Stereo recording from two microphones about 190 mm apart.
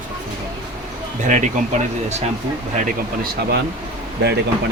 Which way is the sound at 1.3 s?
40° right (ahead or behind).